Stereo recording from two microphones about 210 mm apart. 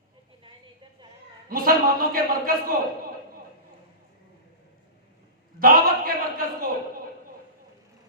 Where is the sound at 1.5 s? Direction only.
45° right (ahead or behind).